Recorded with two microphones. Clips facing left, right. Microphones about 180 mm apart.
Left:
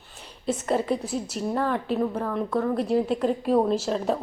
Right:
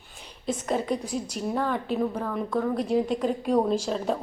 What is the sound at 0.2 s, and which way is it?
A woman's voice, 5° left (ahead or behind).